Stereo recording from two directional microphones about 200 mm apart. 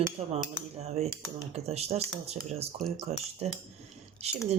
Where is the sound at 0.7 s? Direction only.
30° right (ahead or behind).